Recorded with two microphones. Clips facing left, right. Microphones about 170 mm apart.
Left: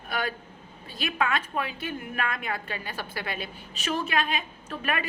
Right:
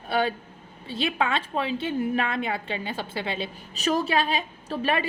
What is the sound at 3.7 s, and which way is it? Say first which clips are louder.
A woman's voice: right 4 dB; 40° right (ahead or behind).